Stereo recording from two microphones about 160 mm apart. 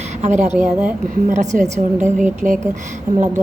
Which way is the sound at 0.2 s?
50° right (ahead or behind).